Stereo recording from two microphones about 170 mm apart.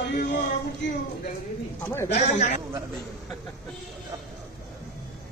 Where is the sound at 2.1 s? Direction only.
40° left (ahead or behind).